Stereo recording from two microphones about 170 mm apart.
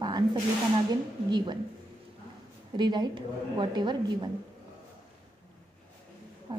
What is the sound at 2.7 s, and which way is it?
A woman's voice, 25° right (ahead or behind).